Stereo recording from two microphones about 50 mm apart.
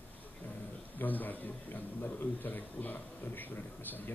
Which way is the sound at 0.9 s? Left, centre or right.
Left.